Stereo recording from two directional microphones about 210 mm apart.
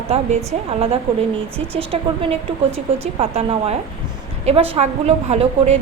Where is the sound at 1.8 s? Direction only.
25° right (ahead or behind).